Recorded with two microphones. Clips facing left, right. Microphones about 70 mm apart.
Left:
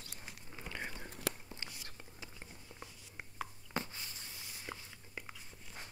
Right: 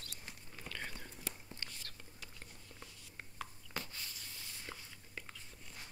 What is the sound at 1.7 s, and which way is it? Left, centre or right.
Whispering, centre.